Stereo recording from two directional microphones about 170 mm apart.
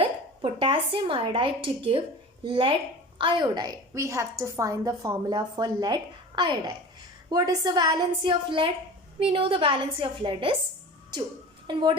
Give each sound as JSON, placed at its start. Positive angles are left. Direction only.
{"t": 0.0, "sound": "a woman's voice", "side_deg": -30}
{"t": 11.7, "sound": "a woman's voice", "side_deg": -25}